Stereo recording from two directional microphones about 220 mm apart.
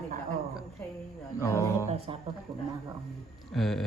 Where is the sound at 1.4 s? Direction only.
15° left (ahead or behind).